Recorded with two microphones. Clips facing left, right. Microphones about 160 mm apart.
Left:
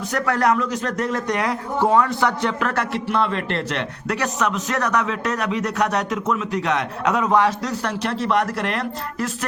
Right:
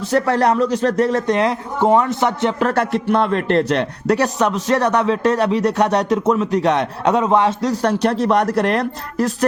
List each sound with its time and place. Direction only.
0.0 s speech: 30° right (ahead or behind)
7.7 s speech: 40° right (ahead or behind)